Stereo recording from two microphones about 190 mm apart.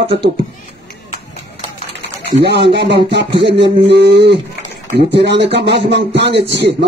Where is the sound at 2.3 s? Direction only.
60° right (ahead or behind).